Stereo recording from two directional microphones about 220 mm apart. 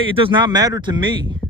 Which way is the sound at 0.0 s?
25° right (ahead or behind).